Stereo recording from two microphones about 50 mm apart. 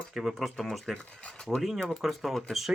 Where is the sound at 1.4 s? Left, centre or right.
Centre.